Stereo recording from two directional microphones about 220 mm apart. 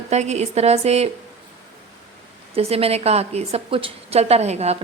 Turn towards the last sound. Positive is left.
turn(degrees=-30)  # may be behind; listen again after turning